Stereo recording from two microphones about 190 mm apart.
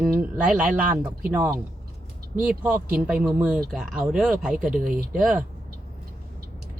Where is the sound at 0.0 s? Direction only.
5° right (ahead or behind).